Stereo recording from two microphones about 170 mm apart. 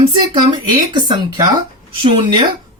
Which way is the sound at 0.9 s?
25° right (ahead or behind).